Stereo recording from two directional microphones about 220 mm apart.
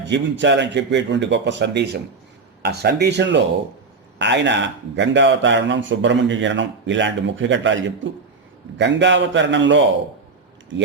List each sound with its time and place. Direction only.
0.1 s speech: 55° right (ahead or behind)